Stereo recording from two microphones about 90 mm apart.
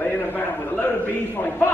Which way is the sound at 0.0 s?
20° left (ahead or behind).